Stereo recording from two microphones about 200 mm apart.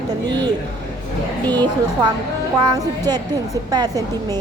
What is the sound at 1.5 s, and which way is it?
A woman's voice, 20° right (ahead or behind).